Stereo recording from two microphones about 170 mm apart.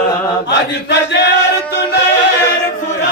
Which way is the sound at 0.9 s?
85° left.